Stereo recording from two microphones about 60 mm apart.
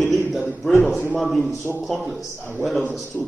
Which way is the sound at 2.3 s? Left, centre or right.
Right.